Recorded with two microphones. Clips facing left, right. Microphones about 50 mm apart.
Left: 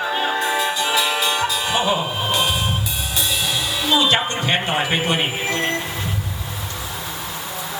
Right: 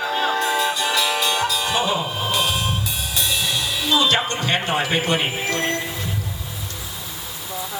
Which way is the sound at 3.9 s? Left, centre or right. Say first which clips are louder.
Left 1 dB; centre.